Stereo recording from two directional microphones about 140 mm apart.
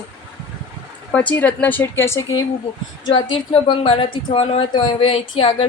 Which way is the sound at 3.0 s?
35° left (ahead or behind).